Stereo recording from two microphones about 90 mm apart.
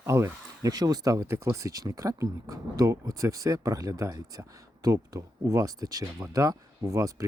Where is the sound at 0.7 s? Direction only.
45° right (ahead or behind).